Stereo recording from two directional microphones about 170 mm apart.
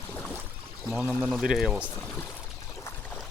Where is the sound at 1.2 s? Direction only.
Centre (ahead or behind).